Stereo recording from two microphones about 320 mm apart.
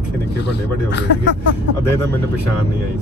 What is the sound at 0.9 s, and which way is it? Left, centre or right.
Speech, left.